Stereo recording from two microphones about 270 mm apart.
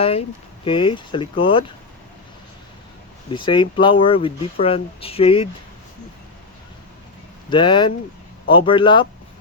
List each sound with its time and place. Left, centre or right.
0.0 s speech: left
3.3 s speech: centre
7.5 s speech: centre